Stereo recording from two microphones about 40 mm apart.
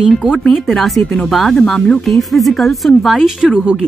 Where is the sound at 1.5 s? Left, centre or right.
Centre.